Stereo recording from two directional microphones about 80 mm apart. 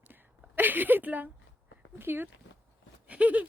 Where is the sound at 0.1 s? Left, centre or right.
Right.